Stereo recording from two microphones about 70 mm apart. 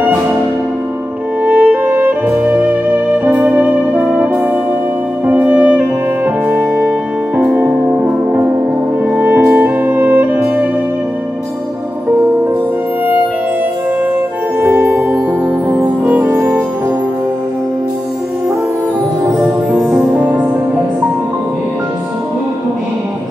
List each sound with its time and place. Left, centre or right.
1.4 s music: right
5.2 s music: right
9.1 s music: right
14.6 s music: right
19.3 s music: centre